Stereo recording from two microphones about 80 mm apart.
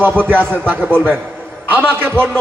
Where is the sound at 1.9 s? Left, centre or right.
Right.